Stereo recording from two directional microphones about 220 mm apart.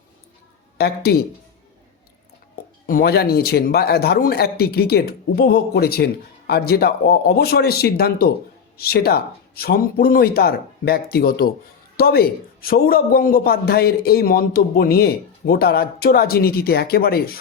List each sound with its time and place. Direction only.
0.8 s a man's voice: 45° left (ahead or behind)
2.8 s a man's voice: 40° left (ahead or behind)